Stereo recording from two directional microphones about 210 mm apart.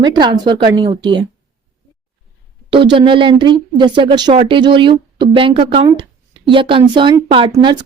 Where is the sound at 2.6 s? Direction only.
20° right (ahead or behind).